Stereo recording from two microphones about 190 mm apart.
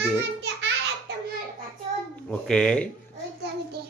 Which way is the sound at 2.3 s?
5° left (ahead or behind).